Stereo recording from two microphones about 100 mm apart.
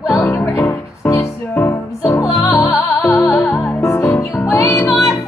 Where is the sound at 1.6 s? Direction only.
20° left (ahead or behind).